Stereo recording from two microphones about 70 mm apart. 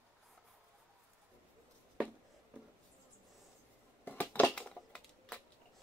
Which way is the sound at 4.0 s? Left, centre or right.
Left.